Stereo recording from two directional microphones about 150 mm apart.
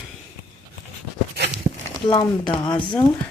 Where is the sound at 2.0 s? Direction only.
30° left (ahead or behind).